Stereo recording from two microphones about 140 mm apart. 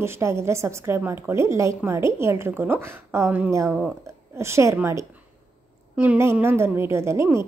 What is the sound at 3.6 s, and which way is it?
Speech, 5° right (ahead or behind).